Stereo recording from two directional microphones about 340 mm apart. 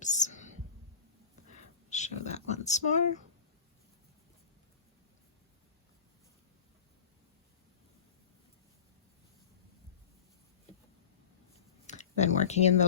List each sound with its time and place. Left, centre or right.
0.0 s whispering: left
1.9 s a sound: left
11.9 s speech: centre